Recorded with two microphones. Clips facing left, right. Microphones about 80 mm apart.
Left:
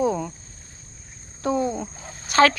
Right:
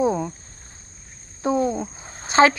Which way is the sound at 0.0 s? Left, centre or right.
Centre.